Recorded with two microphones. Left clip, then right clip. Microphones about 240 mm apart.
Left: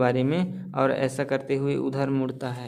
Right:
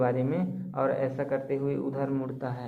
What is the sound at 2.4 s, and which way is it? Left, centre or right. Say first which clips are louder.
Speech: left 2 dB; left.